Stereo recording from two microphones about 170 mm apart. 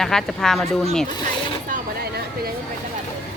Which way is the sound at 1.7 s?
65° right (ahead or behind).